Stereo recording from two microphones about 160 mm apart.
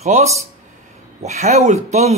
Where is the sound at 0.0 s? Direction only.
45° right (ahead or behind).